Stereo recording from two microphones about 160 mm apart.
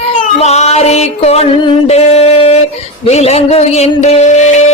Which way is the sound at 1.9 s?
40° left (ahead or behind).